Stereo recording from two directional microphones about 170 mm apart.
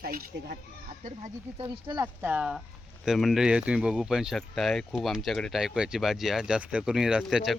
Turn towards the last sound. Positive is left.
turn(degrees=-5)  # may be behind; listen again after turning